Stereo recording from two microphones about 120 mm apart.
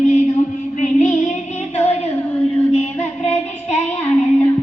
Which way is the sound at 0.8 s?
80° left.